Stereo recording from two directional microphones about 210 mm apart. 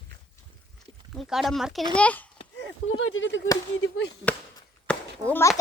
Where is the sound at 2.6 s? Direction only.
65° left (ahead or behind).